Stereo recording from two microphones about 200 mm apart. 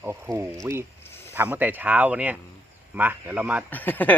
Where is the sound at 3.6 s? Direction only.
10° left (ahead or behind).